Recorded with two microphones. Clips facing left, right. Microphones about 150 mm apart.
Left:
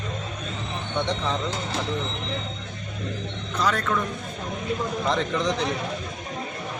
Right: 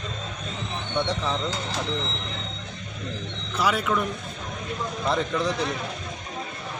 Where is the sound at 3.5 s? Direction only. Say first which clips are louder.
Right 1 dB; 10° right (ahead or behind).